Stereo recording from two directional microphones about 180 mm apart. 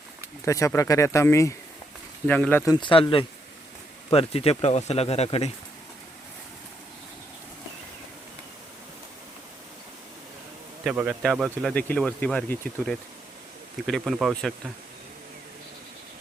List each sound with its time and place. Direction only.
0.4 s speech: 15° left (ahead or behind)
2.8 s speech: 30° left (ahead or behind)
10.8 s a man's voice: 10° right (ahead or behind)
11.7 s speech: 5° left (ahead or behind)